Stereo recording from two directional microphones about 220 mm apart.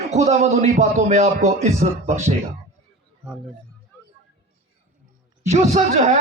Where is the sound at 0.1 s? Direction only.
30° right (ahead or behind).